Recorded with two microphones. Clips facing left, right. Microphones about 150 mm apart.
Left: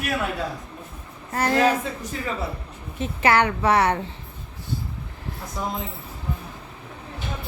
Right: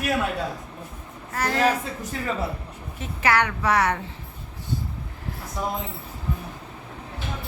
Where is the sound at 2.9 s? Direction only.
25° left (ahead or behind).